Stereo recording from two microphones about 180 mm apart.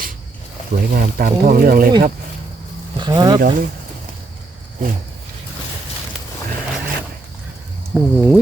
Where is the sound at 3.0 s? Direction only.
20° right (ahead or behind).